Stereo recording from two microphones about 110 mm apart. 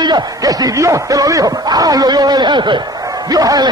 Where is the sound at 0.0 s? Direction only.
40° right (ahead or behind).